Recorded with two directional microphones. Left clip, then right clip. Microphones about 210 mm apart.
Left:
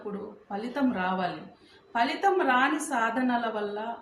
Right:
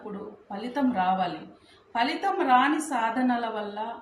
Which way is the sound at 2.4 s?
10° left (ahead or behind).